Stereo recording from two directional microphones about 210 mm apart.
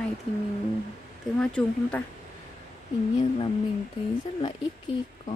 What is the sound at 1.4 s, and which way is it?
Speech, 5° left (ahead or behind).